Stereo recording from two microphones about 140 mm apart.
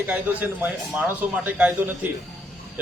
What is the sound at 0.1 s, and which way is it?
A man's voice, 10° right (ahead or behind).